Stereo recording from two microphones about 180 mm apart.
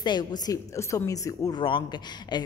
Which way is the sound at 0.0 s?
25° left (ahead or behind).